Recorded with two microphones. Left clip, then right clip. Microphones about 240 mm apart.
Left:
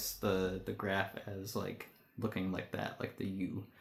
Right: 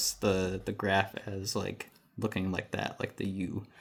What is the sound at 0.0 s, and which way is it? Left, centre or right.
Speech, right.